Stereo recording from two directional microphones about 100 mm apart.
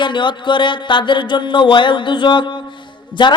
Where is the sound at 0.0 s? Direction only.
55° left (ahead or behind).